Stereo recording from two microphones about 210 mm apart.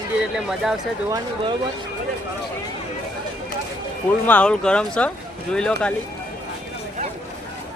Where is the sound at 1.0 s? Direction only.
15° right (ahead or behind).